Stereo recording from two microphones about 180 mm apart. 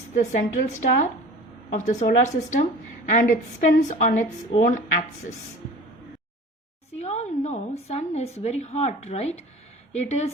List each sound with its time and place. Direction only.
0.2 s a woman's voice: 45° left (ahead or behind)
7.0 s a woman's voice: 40° left (ahead or behind)